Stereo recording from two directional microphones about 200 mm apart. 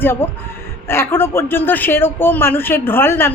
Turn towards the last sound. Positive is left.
turn(degrees=10)  # may be behind; listen again after turning